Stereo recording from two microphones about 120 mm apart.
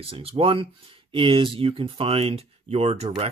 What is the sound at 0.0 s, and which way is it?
Speech, 50° right (ahead or behind).